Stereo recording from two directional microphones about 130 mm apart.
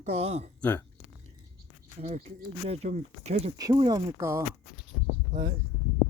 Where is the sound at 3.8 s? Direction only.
30° right (ahead or behind).